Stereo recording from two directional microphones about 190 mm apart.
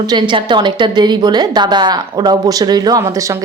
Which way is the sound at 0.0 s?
25° right (ahead or behind).